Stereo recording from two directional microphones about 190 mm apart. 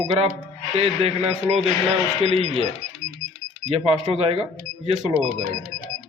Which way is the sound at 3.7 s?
35° right (ahead or behind).